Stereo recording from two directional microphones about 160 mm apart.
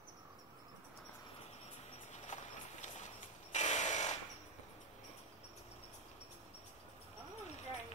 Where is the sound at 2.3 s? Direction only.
50° left (ahead or behind).